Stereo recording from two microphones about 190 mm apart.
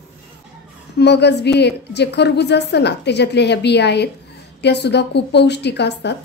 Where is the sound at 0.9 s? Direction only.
60° left (ahead or behind).